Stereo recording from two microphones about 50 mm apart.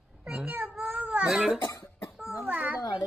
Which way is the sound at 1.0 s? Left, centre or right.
Right.